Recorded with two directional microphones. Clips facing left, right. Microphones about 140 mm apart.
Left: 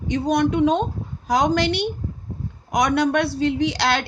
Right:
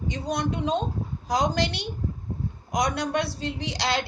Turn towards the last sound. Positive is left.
turn(degrees=70)  # may be behind; listen again after turning